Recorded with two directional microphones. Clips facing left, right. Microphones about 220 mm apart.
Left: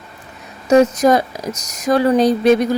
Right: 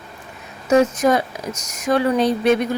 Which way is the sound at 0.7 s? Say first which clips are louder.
Left 4 dB; 40° left (ahead or behind).